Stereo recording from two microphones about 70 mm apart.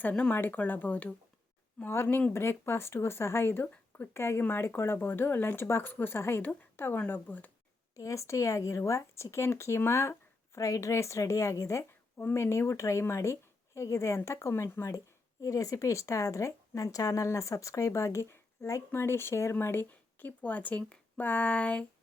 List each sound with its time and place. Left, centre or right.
0.0 s speech: centre
1.9 s speech: left
7.9 s speech: left
15.4 s speech: left
19.9 s speech: left